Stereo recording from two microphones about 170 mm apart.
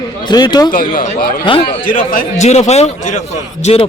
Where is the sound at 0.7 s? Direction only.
55° left (ahead or behind).